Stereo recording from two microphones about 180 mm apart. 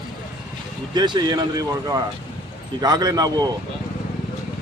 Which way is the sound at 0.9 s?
25° right (ahead or behind).